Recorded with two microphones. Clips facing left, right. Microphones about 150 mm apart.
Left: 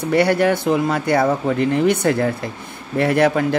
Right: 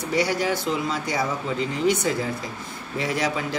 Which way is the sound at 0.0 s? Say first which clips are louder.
Left 8 dB; 55° left (ahead or behind).